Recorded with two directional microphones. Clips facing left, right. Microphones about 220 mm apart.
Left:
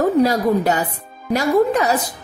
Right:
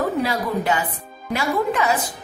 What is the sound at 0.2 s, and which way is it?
A woman's voice, 40° left (ahead or behind).